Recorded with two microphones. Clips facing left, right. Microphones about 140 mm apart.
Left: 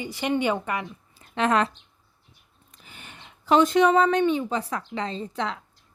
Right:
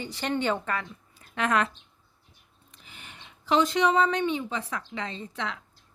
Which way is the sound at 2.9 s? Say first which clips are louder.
Left 2 dB; 50° left (ahead or behind).